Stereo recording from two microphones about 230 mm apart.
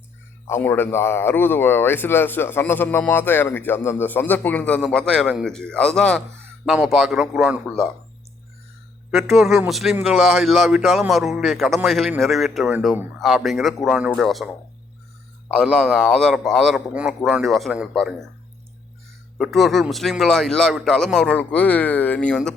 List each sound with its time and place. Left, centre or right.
0.4 s speech: centre
9.6 s speech: centre
15.5 s speech: centre
19.4 s speech: centre